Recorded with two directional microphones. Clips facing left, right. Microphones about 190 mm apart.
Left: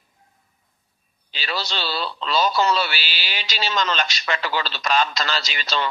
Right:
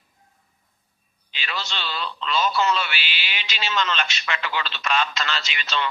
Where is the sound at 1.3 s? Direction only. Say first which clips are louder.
Left 4 dB; 35° left (ahead or behind).